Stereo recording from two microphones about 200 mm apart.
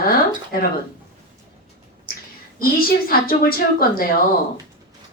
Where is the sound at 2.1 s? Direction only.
45° left (ahead or behind).